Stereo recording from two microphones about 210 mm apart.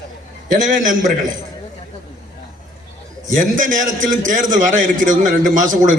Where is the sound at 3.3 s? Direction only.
40° right (ahead or behind).